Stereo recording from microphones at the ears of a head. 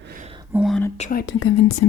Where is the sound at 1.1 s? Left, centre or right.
Left.